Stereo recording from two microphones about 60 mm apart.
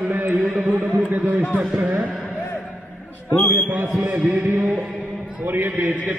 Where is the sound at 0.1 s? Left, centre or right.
Right.